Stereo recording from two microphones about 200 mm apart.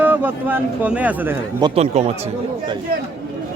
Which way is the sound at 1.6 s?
20° right (ahead or behind).